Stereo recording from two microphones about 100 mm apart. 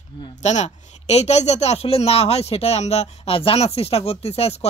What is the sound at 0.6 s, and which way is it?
Speech, 90° left.